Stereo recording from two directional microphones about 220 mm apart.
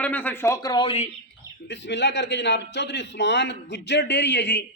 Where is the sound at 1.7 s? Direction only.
55° left (ahead or behind).